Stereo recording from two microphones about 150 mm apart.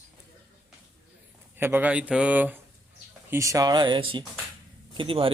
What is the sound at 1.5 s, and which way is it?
Speech, 15° right (ahead or behind).